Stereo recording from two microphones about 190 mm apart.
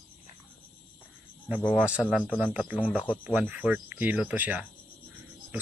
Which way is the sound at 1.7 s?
10° left (ahead or behind).